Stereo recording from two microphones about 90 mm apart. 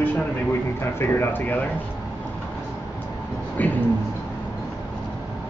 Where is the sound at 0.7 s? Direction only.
25° left (ahead or behind).